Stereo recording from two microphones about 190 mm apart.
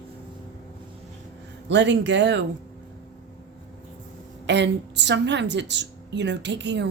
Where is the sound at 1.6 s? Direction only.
70° right (ahead or behind).